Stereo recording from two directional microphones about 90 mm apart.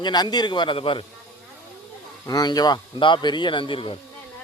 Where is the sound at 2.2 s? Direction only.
50° left (ahead or behind); by 3.9 s 80° left.